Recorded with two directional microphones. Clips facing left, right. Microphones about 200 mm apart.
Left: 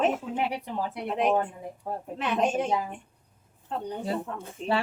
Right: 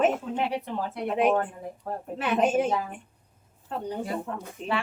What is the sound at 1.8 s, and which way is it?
Speech, 10° left (ahead or behind).